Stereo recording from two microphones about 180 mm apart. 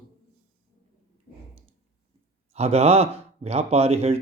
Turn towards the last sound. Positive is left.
turn(degrees=-35)  # may be behind; listen again after turning